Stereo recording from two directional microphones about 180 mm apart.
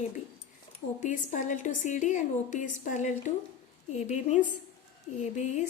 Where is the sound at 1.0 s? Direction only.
45° left (ahead or behind).